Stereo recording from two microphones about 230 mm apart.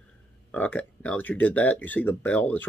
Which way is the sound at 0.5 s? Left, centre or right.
Centre.